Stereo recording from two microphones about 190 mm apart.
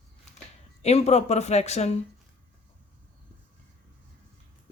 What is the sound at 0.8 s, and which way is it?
Speech, 35° left (ahead or behind).